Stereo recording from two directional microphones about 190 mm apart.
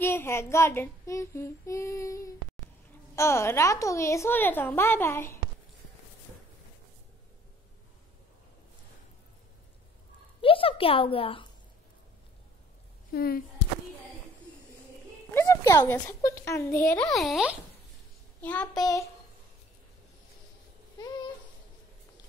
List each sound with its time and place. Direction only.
0.0 s humming: 10° left (ahead or behind)
10.4 s speech: 30° left (ahead or behind)
13.1 s speech: 50° left (ahead or behind)
15.3 s a child's voice: 15° left (ahead or behind)
17.1 s a child's voice: centre (ahead or behind)
18.4 s humming: 5° left (ahead or behind)
18.8 s humming: 20° left (ahead or behind)
21.0 s a sound: 25° left (ahead or behind)